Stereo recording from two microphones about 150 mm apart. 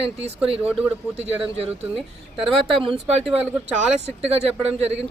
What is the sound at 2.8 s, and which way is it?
Speech, 40° right (ahead or behind).